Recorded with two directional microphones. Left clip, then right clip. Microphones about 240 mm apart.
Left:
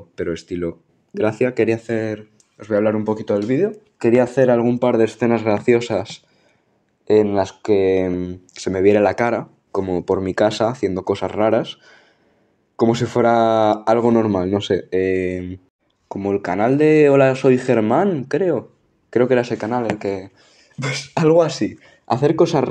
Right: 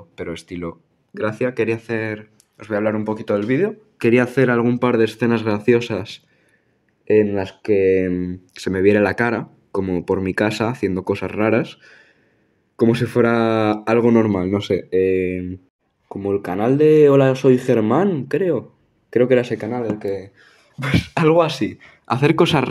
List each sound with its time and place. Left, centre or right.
0.2 s speech: centre
4.0 s speech: right
7.1 s speech: centre
7.7 s speech: centre
19.7 s speech: centre
22.2 s speech: right